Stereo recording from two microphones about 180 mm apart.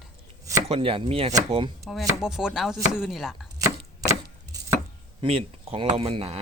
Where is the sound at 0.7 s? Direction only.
30° right (ahead or behind).